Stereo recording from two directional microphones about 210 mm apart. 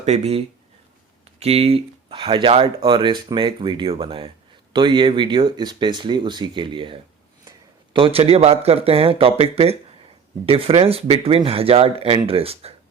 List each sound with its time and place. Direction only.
0.0 s speech: 30° right (ahead or behind)